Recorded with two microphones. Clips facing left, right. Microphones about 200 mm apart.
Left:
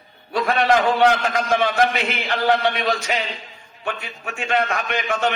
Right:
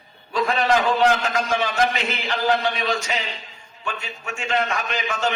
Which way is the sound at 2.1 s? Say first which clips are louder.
Left 2 dB; 60° left (ahead or behind).